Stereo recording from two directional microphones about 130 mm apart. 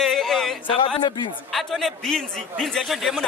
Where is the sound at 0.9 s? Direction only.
35° left (ahead or behind).